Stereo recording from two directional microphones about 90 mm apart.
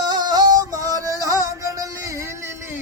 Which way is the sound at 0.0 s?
50° right (ahead or behind).